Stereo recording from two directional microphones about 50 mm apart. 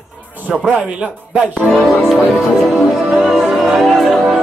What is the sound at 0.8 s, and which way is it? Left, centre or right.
Speech, right.